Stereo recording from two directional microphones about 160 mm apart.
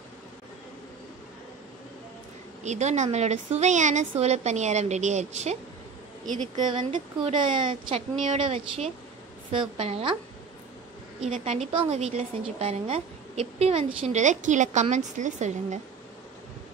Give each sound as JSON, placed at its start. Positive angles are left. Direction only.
{"t": 2.6, "sound": "a woman's voice", "side_deg": -45}
{"t": 6.9, "sound": "a woman's voice", "side_deg": -30}
{"t": 8.2, "sound": "a woman's voice", "side_deg": -45}
{"t": 11.2, "sound": "a woman's voice", "side_deg": -45}